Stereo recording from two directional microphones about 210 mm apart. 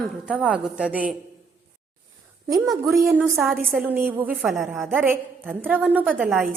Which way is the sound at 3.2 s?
Centre (ahead or behind).